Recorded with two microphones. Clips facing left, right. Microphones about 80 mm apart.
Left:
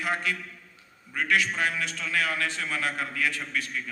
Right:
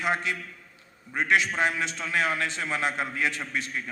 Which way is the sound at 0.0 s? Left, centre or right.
Right.